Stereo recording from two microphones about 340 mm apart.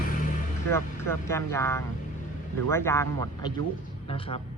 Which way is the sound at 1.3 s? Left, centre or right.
Centre.